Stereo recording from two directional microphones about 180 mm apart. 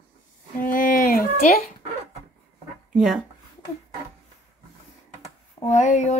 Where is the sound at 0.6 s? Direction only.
50° left (ahead or behind).